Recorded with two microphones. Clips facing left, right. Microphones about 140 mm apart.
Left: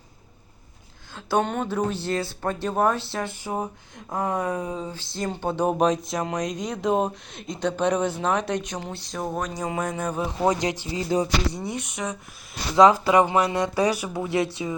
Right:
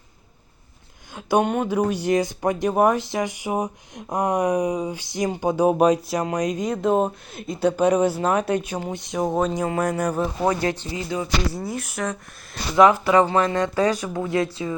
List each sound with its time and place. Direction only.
1.1 s speech: 15° right (ahead or behind)
9.8 s speech: 10° right (ahead or behind)
10.2 s speech: 15° left (ahead or behind)
11.1 s speech: 35° left (ahead or behind)
11.5 s speech: centre (ahead or behind)
12.7 s speech: 20° left (ahead or behind)
14.3 s speech: 20° left (ahead or behind)